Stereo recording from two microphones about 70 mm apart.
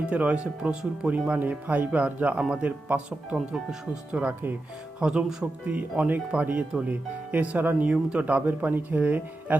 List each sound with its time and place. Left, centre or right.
0.0 s speech: centre
3.3 s speech: centre
4.1 s speech: centre